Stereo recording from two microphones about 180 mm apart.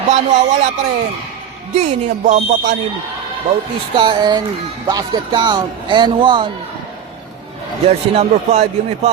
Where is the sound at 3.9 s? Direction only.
25° right (ahead or behind).